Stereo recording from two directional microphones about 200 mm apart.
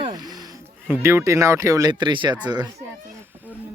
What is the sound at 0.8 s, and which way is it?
Speech, 10° right (ahead or behind).